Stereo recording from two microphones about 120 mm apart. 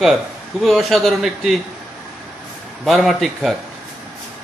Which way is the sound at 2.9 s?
Centre (ahead or behind).